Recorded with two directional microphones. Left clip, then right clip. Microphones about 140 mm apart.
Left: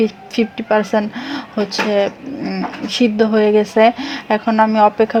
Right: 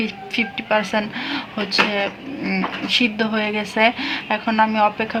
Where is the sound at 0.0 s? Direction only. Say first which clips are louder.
Left 5 dB; 50° left (ahead or behind).